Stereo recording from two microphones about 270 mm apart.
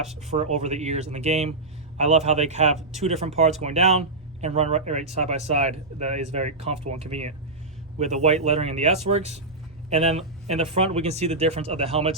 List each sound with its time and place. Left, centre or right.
0.2 s speech: right